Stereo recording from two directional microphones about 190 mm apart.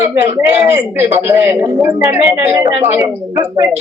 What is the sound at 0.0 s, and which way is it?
A man's voice, 10° right (ahead or behind).